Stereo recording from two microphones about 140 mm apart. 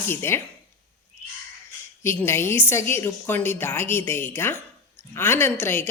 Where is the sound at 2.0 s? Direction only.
15° left (ahead or behind).